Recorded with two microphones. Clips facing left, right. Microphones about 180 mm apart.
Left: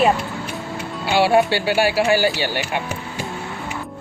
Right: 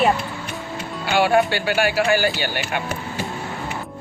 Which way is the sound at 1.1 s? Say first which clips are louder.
Left 2 dB; 30° left (ahead or behind).